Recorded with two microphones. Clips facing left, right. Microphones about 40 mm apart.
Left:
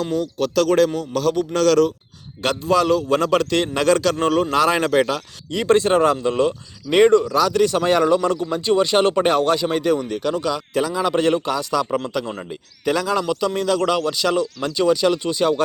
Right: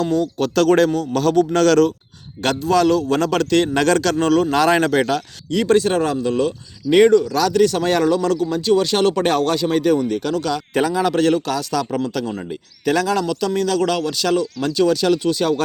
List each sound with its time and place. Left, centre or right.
0.0 s a man's voice: centre
2.4 s speech: centre
4.5 s a man's voice: centre
5.6 s speech: left
7.5 s speech: centre
13.2 s speech: centre